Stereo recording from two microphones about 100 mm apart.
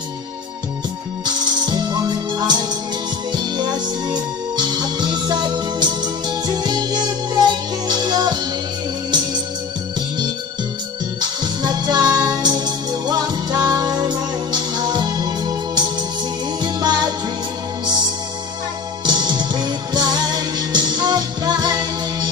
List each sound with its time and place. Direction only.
1.2 s music: 45° right (ahead or behind)
9.9 s music: 45° right (ahead or behind)
19.0 s music: 45° right (ahead or behind)